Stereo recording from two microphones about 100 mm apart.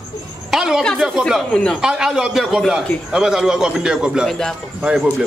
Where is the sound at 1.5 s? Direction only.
10° left (ahead or behind).